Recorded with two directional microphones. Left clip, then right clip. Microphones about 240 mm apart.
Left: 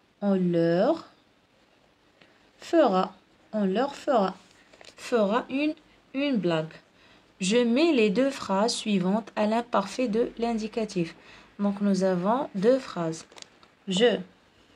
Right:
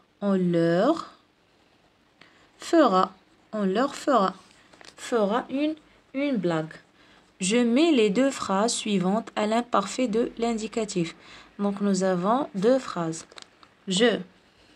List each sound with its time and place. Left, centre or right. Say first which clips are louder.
0.2 s speech: right 1 dB; right
2.1 s a sound: right 5 dB; right
5.0 s speech: even; right
7.5 s speech: right 1 dB; right
13.8 s speech: even; right